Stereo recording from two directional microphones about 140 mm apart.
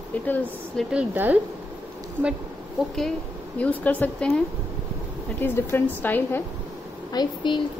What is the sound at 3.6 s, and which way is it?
A woman's voice, 10° left (ahead or behind).